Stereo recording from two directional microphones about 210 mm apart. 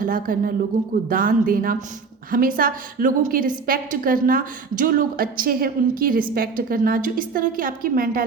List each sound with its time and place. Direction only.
0.0 s a woman's voice: 40° right (ahead or behind)